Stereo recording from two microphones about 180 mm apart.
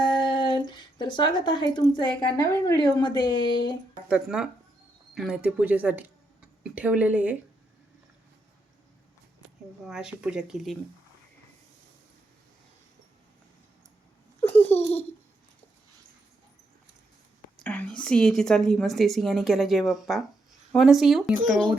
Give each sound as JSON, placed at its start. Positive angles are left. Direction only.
{"t": 0.0, "sound": "speech", "side_deg": 25}
{"t": 4.1, "sound": "a woman's voice", "side_deg": -5}
{"t": 9.8, "sound": "a woman's voice", "side_deg": -5}
{"t": 14.4, "sound": "a sound", "side_deg": 10}
{"t": 17.6, "sound": "a woman's voice", "side_deg": 10}